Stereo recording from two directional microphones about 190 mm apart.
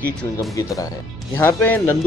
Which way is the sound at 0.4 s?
15° left (ahead or behind).